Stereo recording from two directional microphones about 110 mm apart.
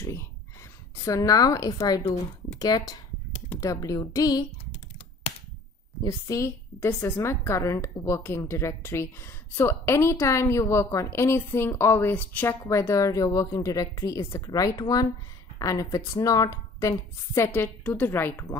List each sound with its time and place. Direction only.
0.0 s a woman's voice: 25° left (ahead or behind)
6.0 s a woman's voice: 30° left (ahead or behind)
12.6 s a woman's voice: 25° left (ahead or behind)